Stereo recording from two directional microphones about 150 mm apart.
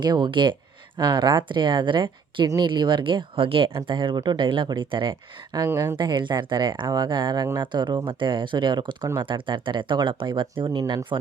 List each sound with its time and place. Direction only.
0.0 s speech: 30° right (ahead or behind)